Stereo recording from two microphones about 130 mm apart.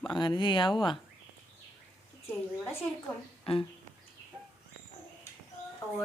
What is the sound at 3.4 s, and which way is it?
Speech, 45° left (ahead or behind).